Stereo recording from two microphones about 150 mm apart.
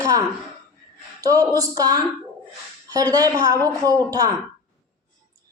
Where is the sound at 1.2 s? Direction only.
25° right (ahead or behind).